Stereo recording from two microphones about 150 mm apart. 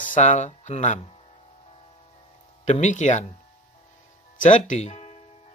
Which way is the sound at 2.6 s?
55° left (ahead or behind).